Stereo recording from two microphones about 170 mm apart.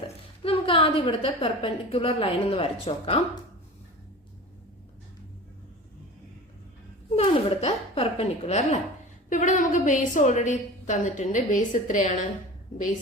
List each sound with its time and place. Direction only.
0.4 s a woman's voice: 35° left (ahead or behind)
7.2 s a woman's voice: 35° left (ahead or behind)